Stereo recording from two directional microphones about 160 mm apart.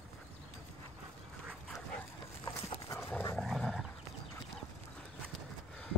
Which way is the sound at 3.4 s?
Centre (ahead or behind).